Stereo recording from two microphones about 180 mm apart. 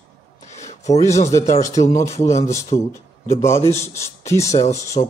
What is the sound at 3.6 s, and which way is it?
Speech, 35° left (ahead or behind).